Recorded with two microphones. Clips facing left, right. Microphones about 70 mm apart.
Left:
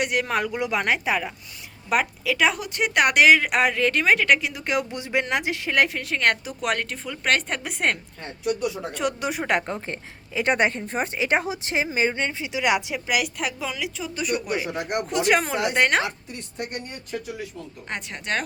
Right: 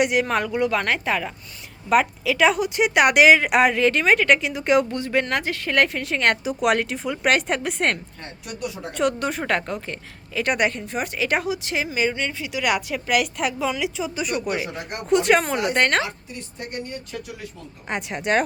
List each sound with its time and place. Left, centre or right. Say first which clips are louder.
0.0 s a woman's voice: right 3 dB; centre
1.9 s speech: right 4 dB; centre
4.9 s a woman's voice: right 2 dB; centre
17.8 s speech: right 6 dB; centre